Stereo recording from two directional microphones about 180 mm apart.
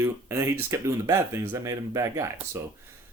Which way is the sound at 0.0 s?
15° right (ahead or behind).